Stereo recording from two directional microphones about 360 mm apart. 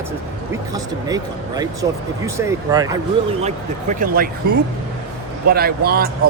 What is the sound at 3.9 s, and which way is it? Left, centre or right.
Speech, right.